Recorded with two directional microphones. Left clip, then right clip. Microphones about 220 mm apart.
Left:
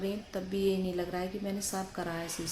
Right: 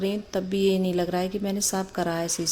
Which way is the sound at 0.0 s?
40° right (ahead or behind).